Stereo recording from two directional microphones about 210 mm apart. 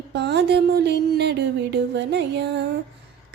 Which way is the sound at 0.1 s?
55° right (ahead or behind).